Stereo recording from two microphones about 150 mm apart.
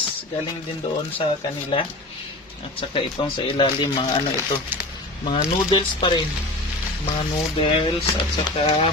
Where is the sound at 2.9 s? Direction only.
35° left (ahead or behind).